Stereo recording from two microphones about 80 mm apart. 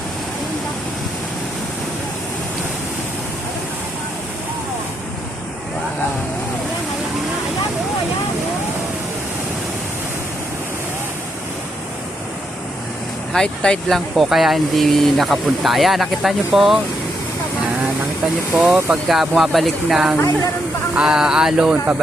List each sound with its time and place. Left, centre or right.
13.3 s speech: centre
18.5 s speech: centre
20.9 s a sound: centre